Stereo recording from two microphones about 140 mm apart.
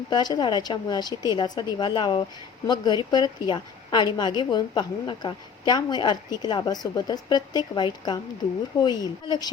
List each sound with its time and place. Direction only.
0.1 s a woman's voice: 30° left (ahead or behind)